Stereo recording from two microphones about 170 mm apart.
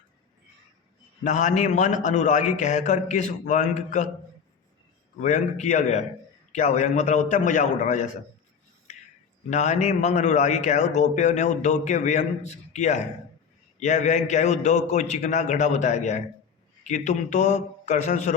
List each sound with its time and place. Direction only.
1.2 s a man's voice: 45° left (ahead or behind)
5.2 s a man's voice: 45° left (ahead or behind)
9.5 s a man's voice: 45° left (ahead or behind)